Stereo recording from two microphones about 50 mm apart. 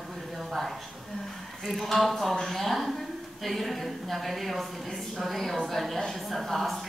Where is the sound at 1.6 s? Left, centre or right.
Centre.